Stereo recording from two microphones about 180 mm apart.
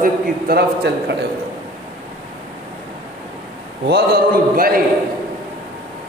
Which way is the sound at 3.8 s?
60° right (ahead or behind).